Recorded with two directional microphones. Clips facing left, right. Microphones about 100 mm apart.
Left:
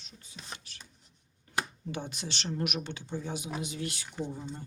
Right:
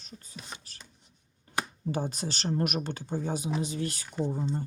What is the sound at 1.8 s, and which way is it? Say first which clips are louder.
Speech: right 6 dB; 40° right (ahead or behind).